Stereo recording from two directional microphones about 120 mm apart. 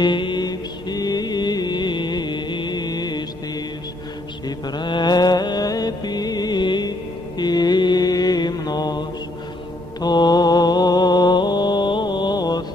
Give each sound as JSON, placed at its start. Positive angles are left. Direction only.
{"t": 0.0, "sound": "mantra", "side_deg": 40}
{"t": 4.5, "sound": "mantra", "side_deg": 40}
{"t": 10.0, "sound": "mantra", "side_deg": 35}